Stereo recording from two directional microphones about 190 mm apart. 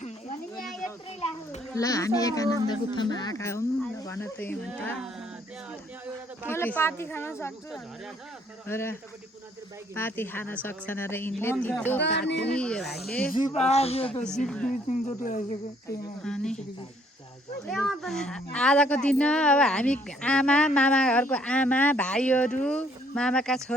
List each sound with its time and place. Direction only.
0.5 s a sound: centre (ahead or behind)
1.7 s speech: 15° left (ahead or behind)
6.5 s speech: 10° left (ahead or behind)
8.6 s speech: 10° left (ahead or behind)
11.9 s speech: 65° left (ahead or behind)
12.5 s speech: 5° left (ahead or behind)
13.5 s speech: 35° left (ahead or behind)
14.3 s speech: 5° left (ahead or behind)
14.7 s speech: 40° left (ahead or behind)
16.2 s speech: 5° left (ahead or behind)
17.7 s speech: centre (ahead or behind)